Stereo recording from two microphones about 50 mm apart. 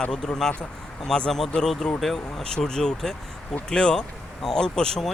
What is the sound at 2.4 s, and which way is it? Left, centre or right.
A man's voice, centre.